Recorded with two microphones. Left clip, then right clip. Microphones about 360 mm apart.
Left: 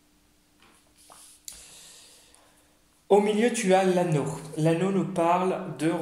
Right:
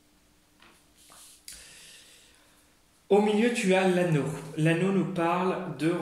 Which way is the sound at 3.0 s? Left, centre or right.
Centre.